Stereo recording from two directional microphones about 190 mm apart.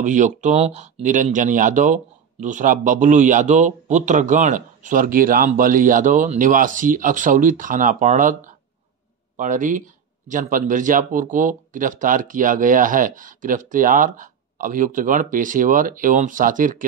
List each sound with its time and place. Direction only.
0.0 s speech: 40° right (ahead or behind)